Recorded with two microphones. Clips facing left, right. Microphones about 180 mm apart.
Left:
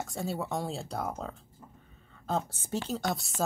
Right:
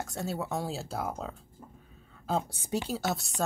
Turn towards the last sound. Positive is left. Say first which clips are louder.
# even
turn(degrees=-5)  # may be behind; listen again after turning